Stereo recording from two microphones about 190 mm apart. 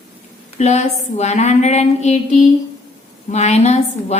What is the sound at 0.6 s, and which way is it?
A woman's voice, 35° left (ahead or behind).